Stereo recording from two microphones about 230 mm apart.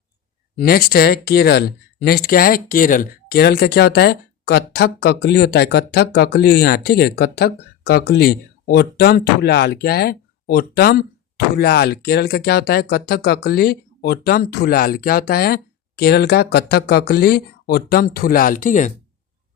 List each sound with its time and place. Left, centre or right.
0.5 s speech: left